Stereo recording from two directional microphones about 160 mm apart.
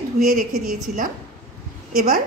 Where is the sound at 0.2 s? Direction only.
65° right (ahead or behind).